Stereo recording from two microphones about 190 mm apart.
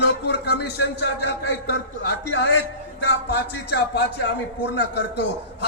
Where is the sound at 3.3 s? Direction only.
60° left (ahead or behind).